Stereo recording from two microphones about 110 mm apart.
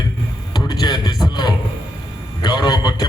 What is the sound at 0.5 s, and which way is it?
A man's voice, 40° left (ahead or behind).